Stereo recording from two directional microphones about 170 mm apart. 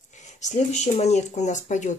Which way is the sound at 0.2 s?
45° left (ahead or behind).